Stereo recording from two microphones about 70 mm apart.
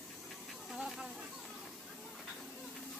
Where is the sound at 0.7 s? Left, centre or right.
Centre.